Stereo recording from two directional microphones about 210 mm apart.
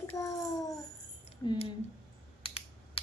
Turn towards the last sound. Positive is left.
turn(degrees=25)  # may be behind; listen again after turning